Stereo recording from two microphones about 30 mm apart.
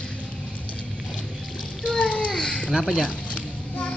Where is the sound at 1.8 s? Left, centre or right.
Left.